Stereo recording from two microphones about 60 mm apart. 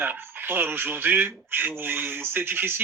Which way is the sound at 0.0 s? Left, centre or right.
Right.